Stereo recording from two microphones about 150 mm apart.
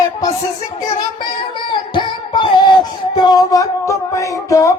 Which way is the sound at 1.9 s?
30° left (ahead or behind).